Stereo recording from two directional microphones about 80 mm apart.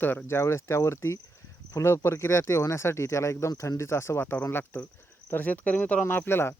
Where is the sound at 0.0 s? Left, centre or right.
Left.